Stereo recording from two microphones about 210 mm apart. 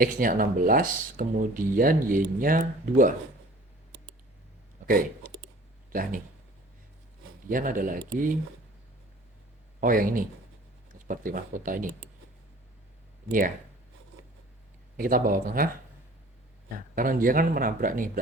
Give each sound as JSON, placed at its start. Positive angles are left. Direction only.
{"t": 0.0, "sound": "speech", "side_deg": -40}
{"t": 4.9, "sound": "speech", "side_deg": -40}
{"t": 7.4, "sound": "speech", "side_deg": -40}
{"t": 9.8, "sound": "speech", "side_deg": -40}
{"t": 14.9, "sound": "speech", "side_deg": -40}
{"t": 16.7, "sound": "speech", "side_deg": -40}